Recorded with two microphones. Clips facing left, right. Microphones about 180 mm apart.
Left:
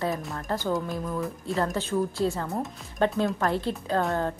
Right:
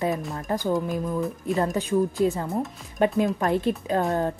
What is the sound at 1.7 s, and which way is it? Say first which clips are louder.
A woman's voice: right 4 dB; 15° right (ahead or behind).